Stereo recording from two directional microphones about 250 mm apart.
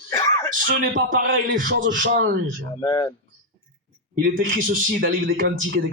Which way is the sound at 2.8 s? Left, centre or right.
Centre.